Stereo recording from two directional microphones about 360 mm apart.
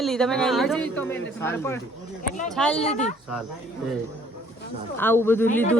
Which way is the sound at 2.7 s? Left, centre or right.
Centre.